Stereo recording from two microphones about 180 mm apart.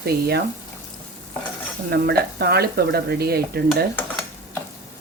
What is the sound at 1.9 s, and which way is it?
Speech, 65° right (ahead or behind).